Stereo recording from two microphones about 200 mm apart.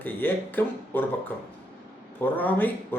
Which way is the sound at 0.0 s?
10° left (ahead or behind).